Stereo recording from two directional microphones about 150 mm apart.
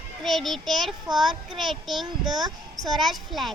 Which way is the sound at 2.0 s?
30° right (ahead or behind).